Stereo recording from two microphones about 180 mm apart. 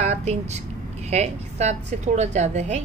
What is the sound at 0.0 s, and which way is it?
A woman's voice, 40° right (ahead or behind).